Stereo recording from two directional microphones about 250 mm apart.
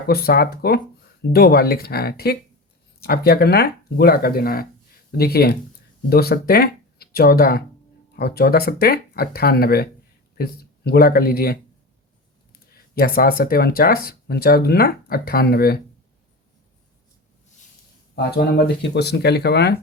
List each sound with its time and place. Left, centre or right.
0.1 s speech: left
13.0 s speech: left
18.1 s speech: left